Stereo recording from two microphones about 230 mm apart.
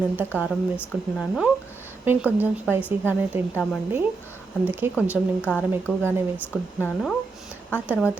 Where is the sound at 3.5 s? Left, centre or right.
Centre.